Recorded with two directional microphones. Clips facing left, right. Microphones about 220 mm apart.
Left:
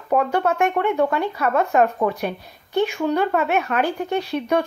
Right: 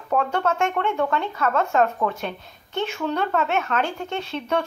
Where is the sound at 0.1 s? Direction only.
15° left (ahead or behind).